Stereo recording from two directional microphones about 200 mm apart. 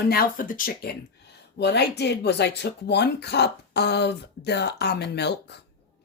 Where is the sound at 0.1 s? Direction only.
45° left (ahead or behind).